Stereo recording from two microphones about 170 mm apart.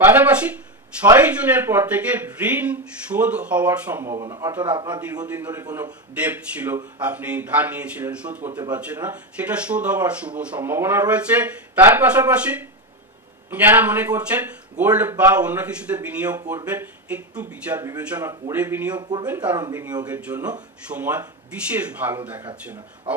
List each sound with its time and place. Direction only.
0.0 s a man's voice: 10° right (ahead or behind)
5.3 s a man's voice: 15° right (ahead or behind)
18.9 s a man's voice: 25° right (ahead or behind)
19.2 s speech: 10° right (ahead or behind)
20.1 s speech: 10° right (ahead or behind)